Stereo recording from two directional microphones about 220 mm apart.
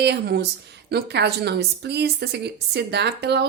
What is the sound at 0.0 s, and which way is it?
A woman's voice, 50° right (ahead or behind).